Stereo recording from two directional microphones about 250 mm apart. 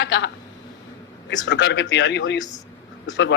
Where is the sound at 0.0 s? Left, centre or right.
Left.